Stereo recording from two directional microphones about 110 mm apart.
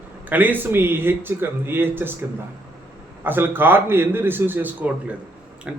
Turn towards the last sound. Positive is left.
turn(degrees=-10)  # may be behind; listen again after turning